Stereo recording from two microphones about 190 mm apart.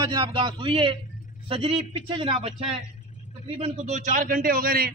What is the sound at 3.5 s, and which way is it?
A man's voice, 35° right (ahead or behind).